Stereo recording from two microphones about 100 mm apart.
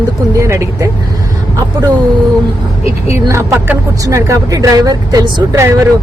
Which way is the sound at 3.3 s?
30° right (ahead or behind).